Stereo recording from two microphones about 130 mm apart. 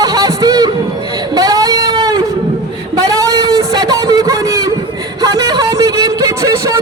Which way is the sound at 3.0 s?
25° right (ahead or behind).